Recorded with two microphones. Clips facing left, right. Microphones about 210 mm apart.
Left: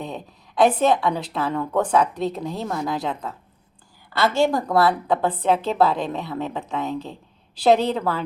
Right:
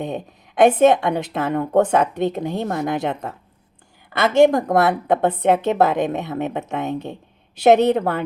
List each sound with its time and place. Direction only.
0.0 s a woman's voice: 20° right (ahead or behind)
2.6 s a woman's voice: 50° right (ahead or behind)
2.8 s a woman's voice: 25° right (ahead or behind)
4.2 s a woman's voice: 20° right (ahead or behind)